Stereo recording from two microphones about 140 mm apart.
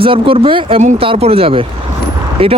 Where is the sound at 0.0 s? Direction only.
40° right (ahead or behind).